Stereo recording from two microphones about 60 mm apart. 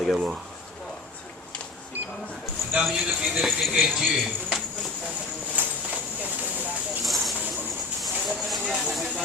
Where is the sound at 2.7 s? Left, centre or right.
Centre.